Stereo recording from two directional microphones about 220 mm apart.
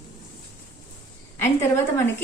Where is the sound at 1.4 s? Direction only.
10° left (ahead or behind).